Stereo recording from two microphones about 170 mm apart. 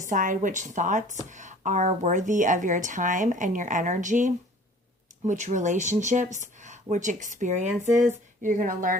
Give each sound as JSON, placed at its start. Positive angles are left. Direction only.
{"t": 0.0, "sound": "a woman's voice", "side_deg": -50}